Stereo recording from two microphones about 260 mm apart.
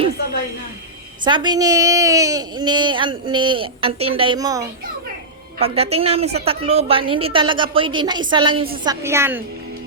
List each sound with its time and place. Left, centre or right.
1.2 s a woman's voice: centre